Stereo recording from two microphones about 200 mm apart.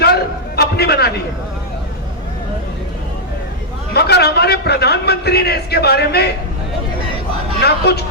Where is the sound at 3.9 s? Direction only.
55° left (ahead or behind).